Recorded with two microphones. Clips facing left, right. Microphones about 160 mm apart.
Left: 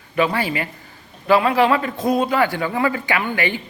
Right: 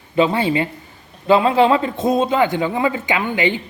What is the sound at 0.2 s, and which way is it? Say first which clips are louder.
A man's voice: right 4 dB; 25° right (ahead or behind).